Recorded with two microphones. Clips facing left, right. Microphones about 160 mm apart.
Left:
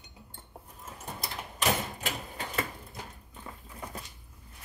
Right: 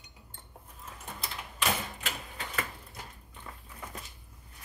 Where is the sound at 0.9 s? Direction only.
40° left (ahead or behind).